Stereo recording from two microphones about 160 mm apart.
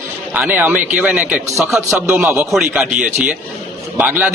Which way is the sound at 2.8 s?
50° right (ahead or behind).